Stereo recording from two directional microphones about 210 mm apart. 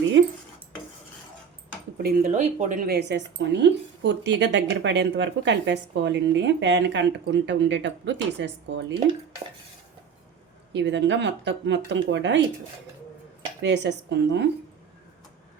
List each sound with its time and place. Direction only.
0.2 s cutlery: 55° right (ahead or behind)
2.0 s speech: 40° right (ahead or behind); by 9.0 s 60° right (ahead or behind)
10.7 s speech: 55° right (ahead or behind)
13.6 s speech: 55° right (ahead or behind)